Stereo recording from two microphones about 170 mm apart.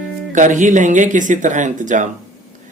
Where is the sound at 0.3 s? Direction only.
45° right (ahead or behind).